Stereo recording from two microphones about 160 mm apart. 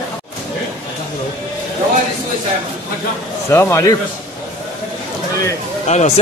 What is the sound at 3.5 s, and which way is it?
Speech, 15° left (ahead or behind).